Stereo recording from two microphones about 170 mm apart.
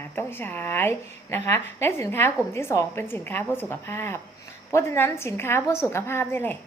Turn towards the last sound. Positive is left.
turn(degrees=15)  # may be behind; listen again after turning